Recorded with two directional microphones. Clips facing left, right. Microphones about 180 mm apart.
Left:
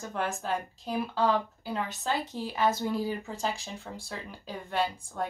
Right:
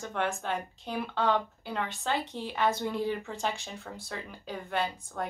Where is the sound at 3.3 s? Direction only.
35° left (ahead or behind).